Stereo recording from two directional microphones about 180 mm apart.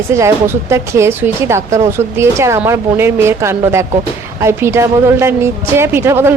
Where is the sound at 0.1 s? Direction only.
15° right (ahead or behind).